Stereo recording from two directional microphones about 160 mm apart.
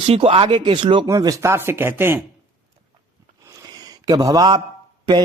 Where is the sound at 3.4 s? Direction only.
20° right (ahead or behind).